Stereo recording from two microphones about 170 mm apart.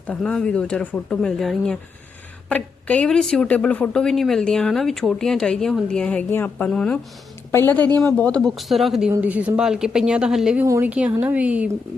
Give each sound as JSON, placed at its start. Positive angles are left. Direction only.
{"t": 0.1, "sound": "speech", "side_deg": 5}
{"t": 7.9, "sound": "speech", "side_deg": -20}
{"t": 8.2, "sound": "speech", "side_deg": 5}